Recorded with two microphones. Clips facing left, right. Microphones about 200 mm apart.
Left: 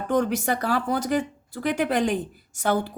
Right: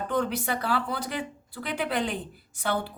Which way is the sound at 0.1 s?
45° left (ahead or behind).